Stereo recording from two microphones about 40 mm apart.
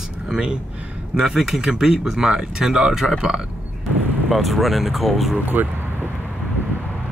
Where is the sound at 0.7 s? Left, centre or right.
Right.